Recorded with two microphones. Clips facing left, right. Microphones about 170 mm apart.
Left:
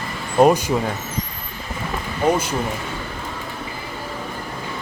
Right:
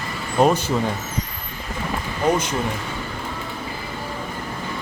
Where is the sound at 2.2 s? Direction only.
10° left (ahead or behind).